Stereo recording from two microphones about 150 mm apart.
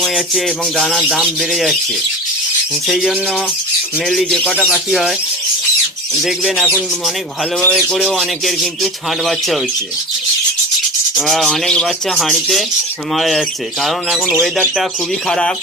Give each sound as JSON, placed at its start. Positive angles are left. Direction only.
{"t": 0.0, "sound": "speech", "side_deg": 0}
{"t": 2.8, "sound": "speech", "side_deg": 0}
{"t": 6.2, "sound": "speech", "side_deg": -5}
{"t": 11.2, "sound": "speech", "side_deg": 0}